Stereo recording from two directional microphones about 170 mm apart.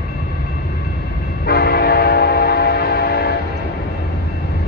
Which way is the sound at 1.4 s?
70° left (ahead or behind).